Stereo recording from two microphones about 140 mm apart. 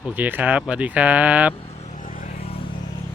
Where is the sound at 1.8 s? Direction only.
65° left (ahead or behind).